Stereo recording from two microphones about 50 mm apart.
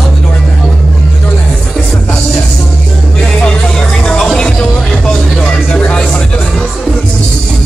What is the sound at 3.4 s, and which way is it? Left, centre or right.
Music, centre.